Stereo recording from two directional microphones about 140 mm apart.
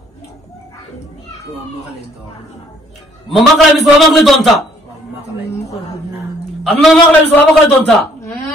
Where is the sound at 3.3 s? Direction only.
Centre (ahead or behind).